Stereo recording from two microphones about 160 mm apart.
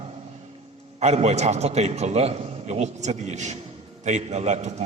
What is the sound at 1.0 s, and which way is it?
A man's voice, 45° right (ahead or behind).